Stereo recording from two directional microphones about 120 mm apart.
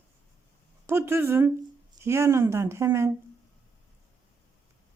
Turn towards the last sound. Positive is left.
turn(degrees=-20)  # may be behind; listen again after turning